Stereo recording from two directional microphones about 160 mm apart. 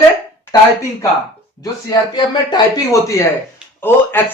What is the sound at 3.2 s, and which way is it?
Speech, 20° left (ahead or behind).